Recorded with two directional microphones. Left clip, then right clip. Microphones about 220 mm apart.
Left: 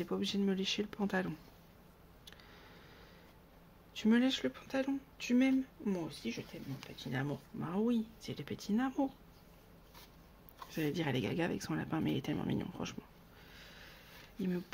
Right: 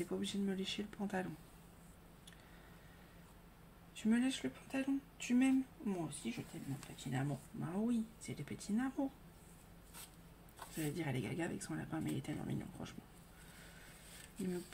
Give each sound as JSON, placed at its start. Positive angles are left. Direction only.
{"t": 0.0, "sound": "speech", "side_deg": 40}
{"t": 3.9, "sound": "speech", "side_deg": 45}
{"t": 10.7, "sound": "speech", "side_deg": 45}